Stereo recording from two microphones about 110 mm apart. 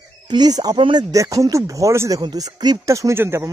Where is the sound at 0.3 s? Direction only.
40° right (ahead or behind).